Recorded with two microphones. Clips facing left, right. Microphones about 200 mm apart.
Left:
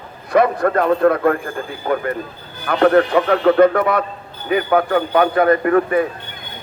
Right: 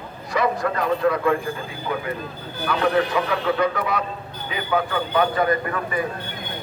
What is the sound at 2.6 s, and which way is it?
A man's voice, 55° left (ahead or behind).